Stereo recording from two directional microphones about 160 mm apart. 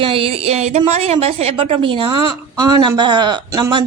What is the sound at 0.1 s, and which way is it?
A woman's voice, 35° right (ahead or behind).